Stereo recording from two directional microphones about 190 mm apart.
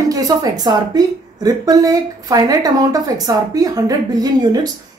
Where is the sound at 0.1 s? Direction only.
20° right (ahead or behind).